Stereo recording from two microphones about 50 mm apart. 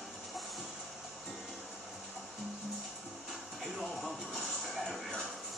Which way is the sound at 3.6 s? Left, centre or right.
Centre.